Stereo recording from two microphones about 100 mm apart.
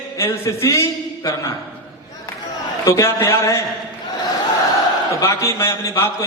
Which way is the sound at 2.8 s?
25° left (ahead or behind).